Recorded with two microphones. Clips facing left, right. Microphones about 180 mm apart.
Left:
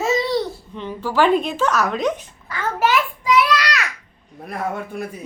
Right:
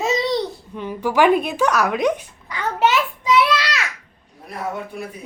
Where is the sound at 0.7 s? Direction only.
10° right (ahead or behind); by 3.8 s 25° right (ahead or behind).